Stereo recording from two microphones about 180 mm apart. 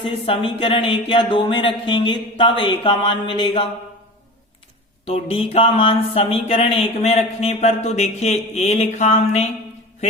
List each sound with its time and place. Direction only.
0.0 s speech: 30° left (ahead or behind)
5.0 s speech: 35° left (ahead or behind)